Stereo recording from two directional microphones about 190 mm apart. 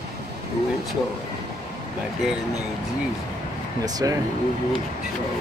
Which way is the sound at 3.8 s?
20° right (ahead or behind).